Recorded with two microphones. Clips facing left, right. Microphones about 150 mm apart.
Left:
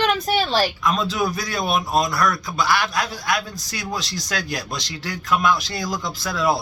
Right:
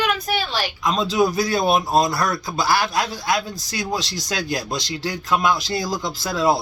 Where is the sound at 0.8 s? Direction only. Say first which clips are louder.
Right 3 dB; 20° right (ahead or behind).